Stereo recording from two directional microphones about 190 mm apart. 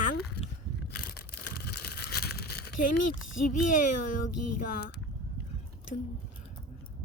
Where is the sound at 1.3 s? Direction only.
55° left (ahead or behind).